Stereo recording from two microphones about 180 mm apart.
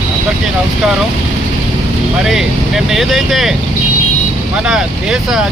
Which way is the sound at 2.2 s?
Centre (ahead or behind).